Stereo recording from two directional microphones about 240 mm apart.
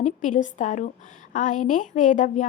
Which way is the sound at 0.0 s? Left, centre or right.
Left.